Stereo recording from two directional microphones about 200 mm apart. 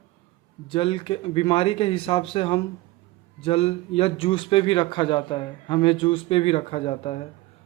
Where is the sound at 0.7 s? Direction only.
25° left (ahead or behind).